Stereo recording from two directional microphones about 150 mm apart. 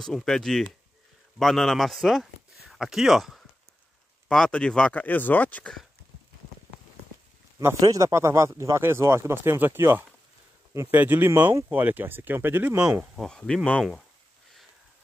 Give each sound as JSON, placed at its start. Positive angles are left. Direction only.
{"t": 0.0, "sound": "speech", "side_deg": 5}
{"t": 7.5, "sound": "speech", "side_deg": -20}